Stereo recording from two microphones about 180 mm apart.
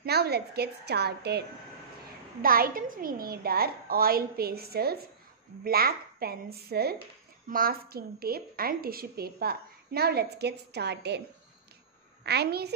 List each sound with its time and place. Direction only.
0.0 s a woman's voice: 60° right (ahead or behind)
2.4 s a woman's voice: 55° right (ahead or behind)